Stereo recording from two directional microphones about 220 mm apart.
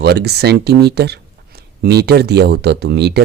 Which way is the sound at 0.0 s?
50° right (ahead or behind).